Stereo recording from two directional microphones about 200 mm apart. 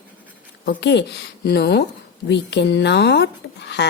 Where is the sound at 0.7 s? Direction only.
60° left (ahead or behind).